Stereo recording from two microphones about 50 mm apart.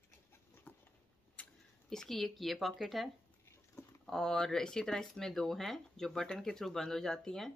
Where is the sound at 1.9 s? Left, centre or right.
Centre.